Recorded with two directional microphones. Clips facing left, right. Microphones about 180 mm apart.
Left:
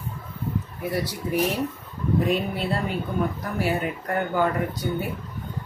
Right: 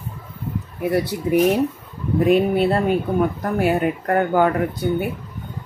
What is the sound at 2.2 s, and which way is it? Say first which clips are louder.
Speech: right 9 dB; 60° right (ahead or behind).